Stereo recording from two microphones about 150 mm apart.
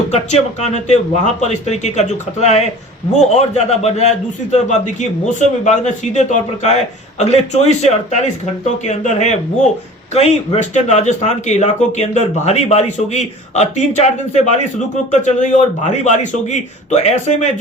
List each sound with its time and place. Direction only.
0.1 s a man's voice: 45° left (ahead or behind)